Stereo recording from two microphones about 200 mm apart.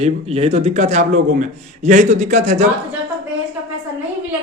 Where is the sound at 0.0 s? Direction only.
30° right (ahead or behind).